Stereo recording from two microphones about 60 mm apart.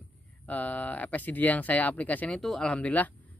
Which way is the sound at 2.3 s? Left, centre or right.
Centre.